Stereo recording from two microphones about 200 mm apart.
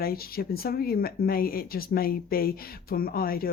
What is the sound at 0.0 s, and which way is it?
A woman's voice, 50° left (ahead or behind).